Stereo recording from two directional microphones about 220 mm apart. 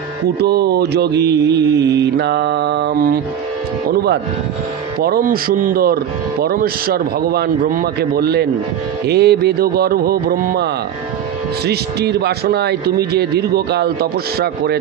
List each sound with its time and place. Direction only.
0.4 s mantra: 45° right (ahead or behind)
5.0 s mantra: 40° right (ahead or behind)